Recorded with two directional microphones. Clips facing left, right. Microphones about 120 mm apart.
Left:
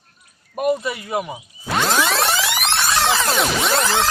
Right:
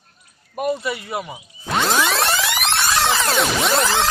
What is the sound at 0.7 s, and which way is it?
Speech, 20° left (ahead or behind).